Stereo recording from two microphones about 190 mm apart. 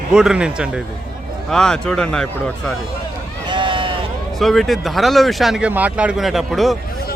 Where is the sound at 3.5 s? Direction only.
25° right (ahead or behind).